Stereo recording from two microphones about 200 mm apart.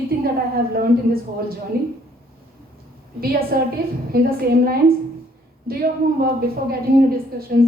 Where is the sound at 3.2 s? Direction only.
50° right (ahead or behind).